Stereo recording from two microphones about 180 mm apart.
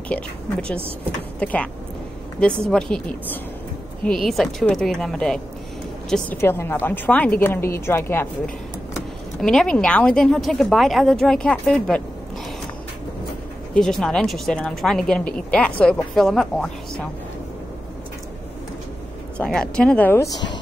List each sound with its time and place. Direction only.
0.7 s speech: 30° right (ahead or behind)
1.4 s a woman's voice: 5° left (ahead or behind)
9.4 s speech: 5° left (ahead or behind)
13.7 s speech: centre (ahead or behind)
19.3 s speech: 5° left (ahead or behind)
20.2 s a woman's voice: 75° left (ahead or behind)